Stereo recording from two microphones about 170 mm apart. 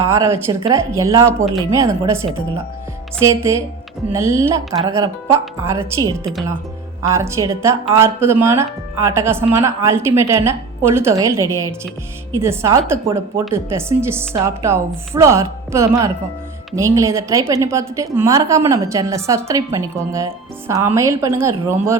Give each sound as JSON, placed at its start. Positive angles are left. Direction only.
{"t": 0.0, "sound": "a woman's voice", "side_deg": -15}